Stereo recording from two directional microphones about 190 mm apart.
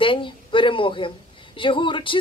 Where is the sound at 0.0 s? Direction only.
25° left (ahead or behind).